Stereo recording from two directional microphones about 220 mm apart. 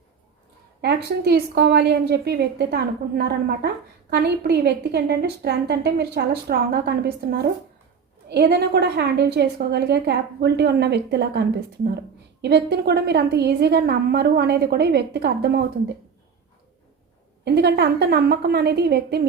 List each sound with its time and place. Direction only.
0.8 s a woman's voice: 50° right (ahead or behind)
17.4 s a woman's voice: 50° right (ahead or behind)